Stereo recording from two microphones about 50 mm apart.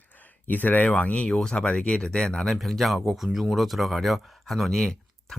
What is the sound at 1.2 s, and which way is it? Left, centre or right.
Speech, centre.